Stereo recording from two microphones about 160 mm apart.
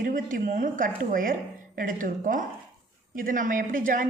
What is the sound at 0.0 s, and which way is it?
A woman's voice, 60° right (ahead or behind).